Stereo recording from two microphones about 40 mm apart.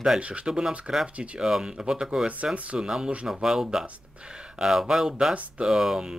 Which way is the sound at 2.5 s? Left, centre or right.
Right.